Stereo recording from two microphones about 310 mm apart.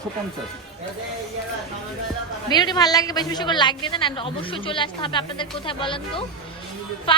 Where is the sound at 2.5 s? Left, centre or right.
Centre.